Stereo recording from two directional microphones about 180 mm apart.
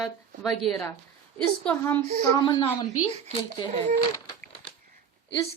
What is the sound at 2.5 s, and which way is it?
Speech, 25° left (ahead or behind).